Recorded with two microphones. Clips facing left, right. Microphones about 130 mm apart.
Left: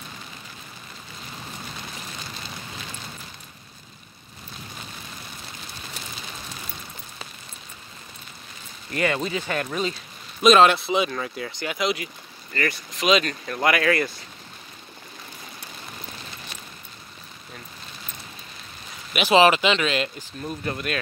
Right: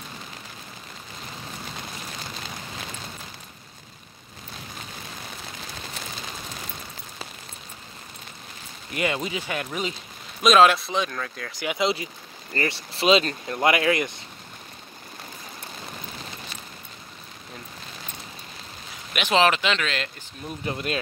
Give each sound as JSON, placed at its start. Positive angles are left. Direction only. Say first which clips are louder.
{"t": 8.9, "sound": "speech", "louder": "left 2 dB", "side_deg": -15}
{"t": 10.4, "sound": "speech", "louder": "left 1 dB", "side_deg": 0}
{"t": 11.6, "sound": "speech", "louder": "right 2 dB", "side_deg": -20}
{"t": 19.1, "sound": "speech", "louder": "left 4 dB", "side_deg": 5}
{"t": 20.6, "sound": "speech", "louder": "right 1 dB", "side_deg": -25}